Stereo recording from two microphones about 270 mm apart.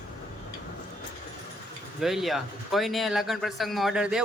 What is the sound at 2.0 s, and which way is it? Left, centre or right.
Speech, centre.